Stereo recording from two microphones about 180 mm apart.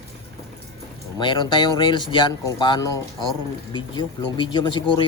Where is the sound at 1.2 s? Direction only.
25° left (ahead or behind).